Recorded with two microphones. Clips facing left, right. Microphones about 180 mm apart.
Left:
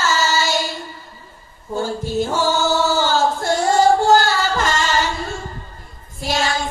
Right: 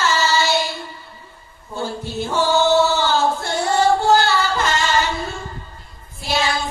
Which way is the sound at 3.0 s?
45° left (ahead or behind).